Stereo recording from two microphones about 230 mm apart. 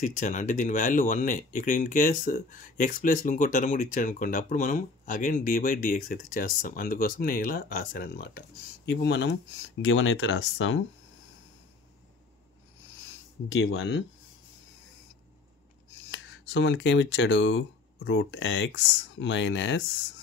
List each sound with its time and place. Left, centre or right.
0.0 s speech: left
13.5 s speech: left
16.1 s speech: left